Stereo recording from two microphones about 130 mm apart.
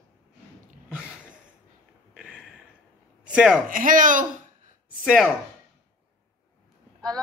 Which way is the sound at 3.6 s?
90° right.